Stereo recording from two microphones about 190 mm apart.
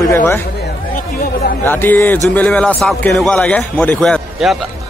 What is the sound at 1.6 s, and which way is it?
A man's voice, 10° left (ahead or behind).